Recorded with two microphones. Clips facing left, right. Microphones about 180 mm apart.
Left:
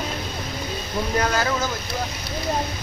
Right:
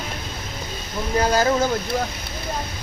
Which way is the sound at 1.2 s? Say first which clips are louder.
Right 8 dB; 35° right (ahead or behind).